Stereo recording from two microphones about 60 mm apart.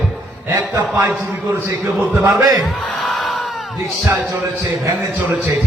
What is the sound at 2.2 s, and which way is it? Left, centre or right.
Speech, right.